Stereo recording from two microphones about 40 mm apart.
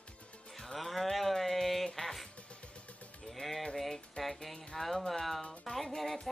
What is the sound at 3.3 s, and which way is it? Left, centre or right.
Music, centre.